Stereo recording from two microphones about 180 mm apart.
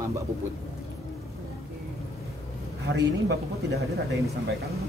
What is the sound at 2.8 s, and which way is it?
Speech, 75° right (ahead or behind).